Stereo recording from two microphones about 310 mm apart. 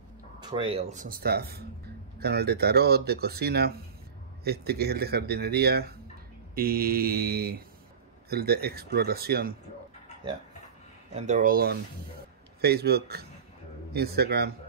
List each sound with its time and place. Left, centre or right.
0.4 s speech: centre
11.1 s speech: right